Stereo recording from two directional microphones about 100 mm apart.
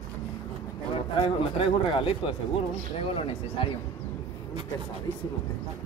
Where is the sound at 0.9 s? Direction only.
70° left (ahead or behind).